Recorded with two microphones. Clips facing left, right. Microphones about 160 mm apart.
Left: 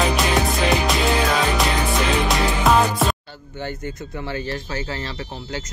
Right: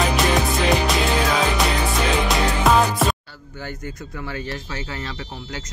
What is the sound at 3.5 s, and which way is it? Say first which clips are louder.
Speech: left 3 dB; 25° left (ahead or behind).